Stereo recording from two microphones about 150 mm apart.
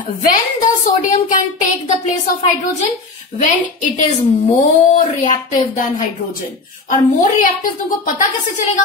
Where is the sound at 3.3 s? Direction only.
55° left (ahead or behind).